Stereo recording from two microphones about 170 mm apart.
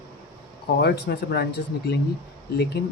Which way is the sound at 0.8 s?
70° left (ahead or behind).